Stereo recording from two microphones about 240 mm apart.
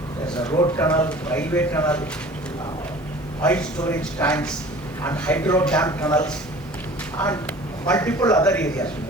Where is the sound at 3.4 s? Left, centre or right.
Centre.